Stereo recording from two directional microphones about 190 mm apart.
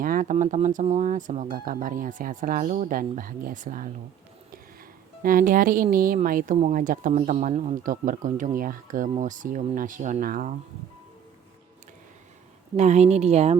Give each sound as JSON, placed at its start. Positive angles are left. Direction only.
{"t": 0.0, "sound": "speech", "side_deg": -45}
{"t": 5.2, "sound": "speech", "side_deg": -45}
{"t": 12.7, "sound": "speech", "side_deg": -35}